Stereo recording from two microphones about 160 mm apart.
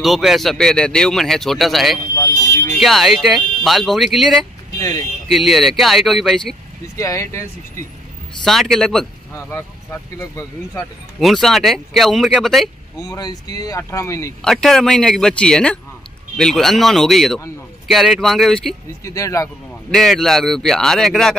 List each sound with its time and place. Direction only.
0.0 s speech: centre (ahead or behind)
4.7 s speech: 20° left (ahead or behind)
5.3 s speech: centre (ahead or behind)
7.0 s speech: 20° left (ahead or behind)
8.5 s speech: centre (ahead or behind)
10.3 s speech: 15° left (ahead or behind)
11.1 s speech: centre (ahead or behind)
12.9 s speech: 20° left (ahead or behind)
14.4 s speech: centre (ahead or behind)
19.0 s speech: 20° left (ahead or behind)
19.9 s speech: centre (ahead or behind)